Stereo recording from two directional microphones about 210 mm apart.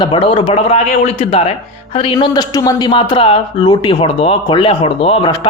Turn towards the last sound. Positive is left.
turn(degrees=25)  # may be behind; listen again after turning